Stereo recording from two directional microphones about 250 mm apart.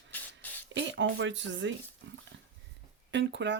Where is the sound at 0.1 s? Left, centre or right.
Centre.